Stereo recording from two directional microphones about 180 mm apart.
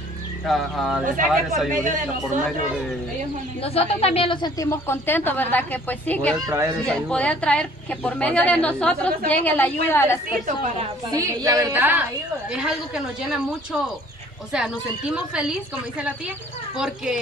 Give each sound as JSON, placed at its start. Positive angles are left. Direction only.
{"t": 0.5, "sound": "speech", "side_deg": 0}
{"t": 1.0, "sound": "speech", "side_deg": -50}
{"t": 3.6, "sound": "a woman's voice", "side_deg": 35}
{"t": 6.4, "sound": "a woman's voice", "side_deg": -15}
{"t": 6.9, "sound": "a woman's voice", "side_deg": 5}
{"t": 11.1, "sound": "a woman's voice", "side_deg": -20}
{"t": 14.5, "sound": "speech", "side_deg": -5}
{"t": 16.7, "sound": "speech", "side_deg": -5}